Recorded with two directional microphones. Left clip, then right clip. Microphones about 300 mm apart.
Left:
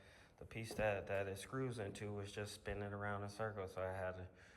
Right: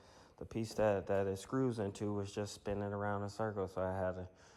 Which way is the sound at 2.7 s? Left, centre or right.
Centre.